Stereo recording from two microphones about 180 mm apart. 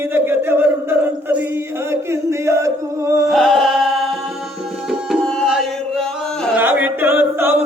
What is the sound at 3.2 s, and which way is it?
Music, centre (ahead or behind).